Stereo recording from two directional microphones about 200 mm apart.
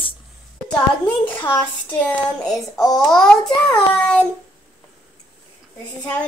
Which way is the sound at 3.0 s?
5° left (ahead or behind).